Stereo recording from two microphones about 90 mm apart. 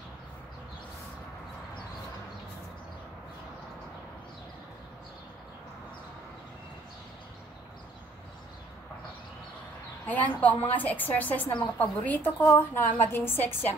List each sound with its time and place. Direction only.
10.0 s a woman's voice: 20° left (ahead or behind)